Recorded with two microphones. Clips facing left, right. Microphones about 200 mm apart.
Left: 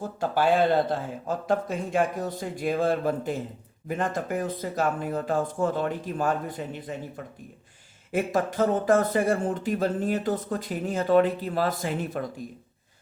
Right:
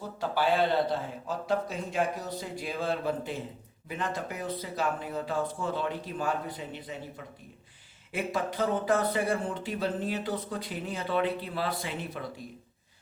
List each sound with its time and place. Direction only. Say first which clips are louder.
0.0 s speech: left 4 dB; 50° left (ahead or behind)
8.1 s speech: left 6 dB; 45° left (ahead or behind)